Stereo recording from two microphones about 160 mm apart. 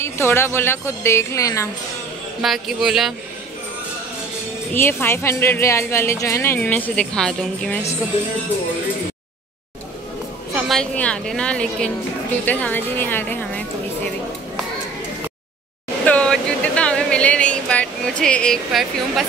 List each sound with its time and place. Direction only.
0.0 s speech: 15° left (ahead or behind)
2.4 s a man's voice: centre (ahead or behind)
4.7 s speech: 15° left (ahead or behind)
10.5 s a woman's voice: 5° left (ahead or behind)
16.1 s a sound: 5° left (ahead or behind)